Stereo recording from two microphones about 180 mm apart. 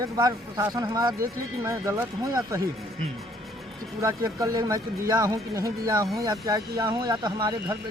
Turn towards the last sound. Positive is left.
turn(degrees=-25)  # may be behind; listen again after turning